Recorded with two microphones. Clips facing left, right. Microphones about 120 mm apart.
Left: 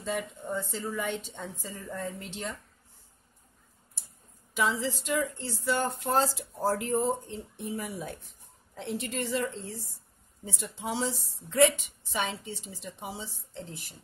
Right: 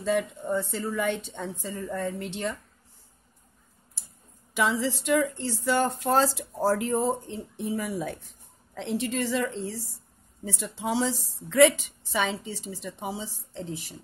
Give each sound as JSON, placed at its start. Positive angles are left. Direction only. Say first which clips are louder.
{"t": 0.0, "sound": "a woman's voice", "louder": "right 7 dB", "side_deg": -75}
{"t": 4.6, "sound": "a woman's voice", "louder": "right 3 dB", "side_deg": -75}